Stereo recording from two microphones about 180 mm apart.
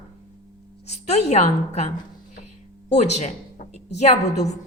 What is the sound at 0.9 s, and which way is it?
A woman's voice, 40° left (ahead or behind).